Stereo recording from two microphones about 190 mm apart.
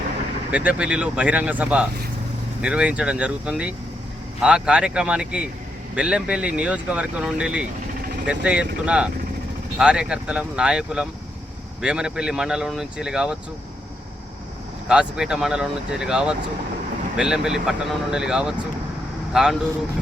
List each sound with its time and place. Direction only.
0.5 s speech: 5° right (ahead or behind)
14.8 s speech: 5° right (ahead or behind)